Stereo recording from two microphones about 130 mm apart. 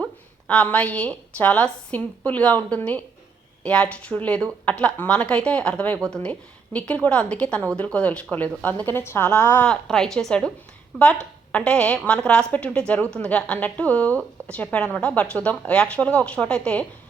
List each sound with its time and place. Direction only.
0.0 s a woman's voice: 10° left (ahead or behind)